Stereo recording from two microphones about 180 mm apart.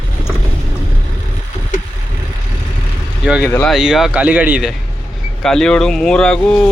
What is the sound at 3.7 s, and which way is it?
Speech, centre (ahead or behind).